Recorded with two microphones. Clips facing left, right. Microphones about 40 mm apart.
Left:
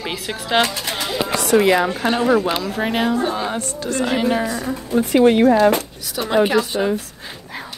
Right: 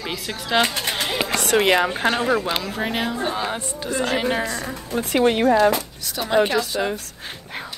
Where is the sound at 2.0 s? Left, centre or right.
Centre.